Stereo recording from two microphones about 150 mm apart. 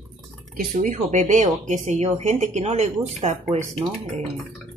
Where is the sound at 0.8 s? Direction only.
50° right (ahead or behind).